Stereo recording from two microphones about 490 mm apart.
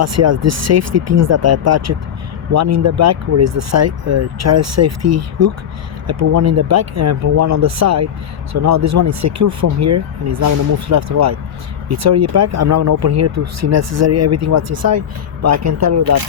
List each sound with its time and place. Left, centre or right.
0.0 s speech: right